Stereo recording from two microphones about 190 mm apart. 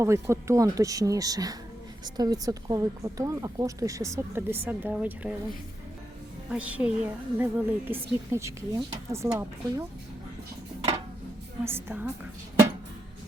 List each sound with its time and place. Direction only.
0.0 s speech: 15° right (ahead or behind)
6.5 s speech: 5° right (ahead or behind)
11.6 s speech: 10° right (ahead or behind)